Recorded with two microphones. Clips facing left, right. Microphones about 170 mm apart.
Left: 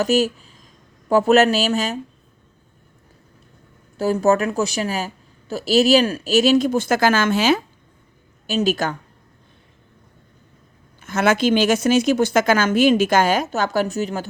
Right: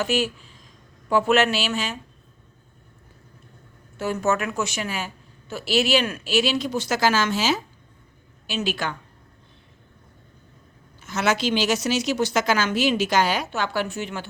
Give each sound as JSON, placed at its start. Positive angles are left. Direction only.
{"t": 0.0, "sound": "a woman's voice", "side_deg": 40}
{"t": 3.9, "sound": "a woman's voice", "side_deg": 35}
{"t": 8.4, "sound": "a woman's voice", "side_deg": 40}
{"t": 11.0, "sound": "speech", "side_deg": 55}